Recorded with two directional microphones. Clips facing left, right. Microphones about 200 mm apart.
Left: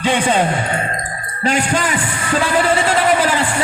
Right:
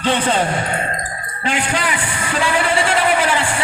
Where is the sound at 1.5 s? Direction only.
45° left (ahead or behind).